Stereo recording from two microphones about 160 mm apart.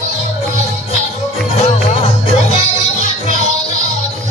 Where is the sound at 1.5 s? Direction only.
40° left (ahead or behind).